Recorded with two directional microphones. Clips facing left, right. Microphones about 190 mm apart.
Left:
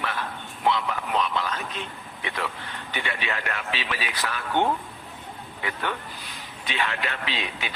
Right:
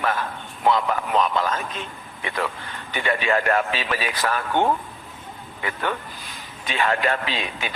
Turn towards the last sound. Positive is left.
turn(degrees=-45)  # may be behind; listen again after turning